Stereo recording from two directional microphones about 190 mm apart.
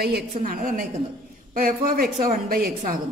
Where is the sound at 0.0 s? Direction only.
55° right (ahead or behind).